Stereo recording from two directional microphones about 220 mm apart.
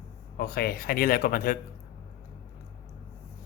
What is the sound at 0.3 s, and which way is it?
Speech, 45° left (ahead or behind).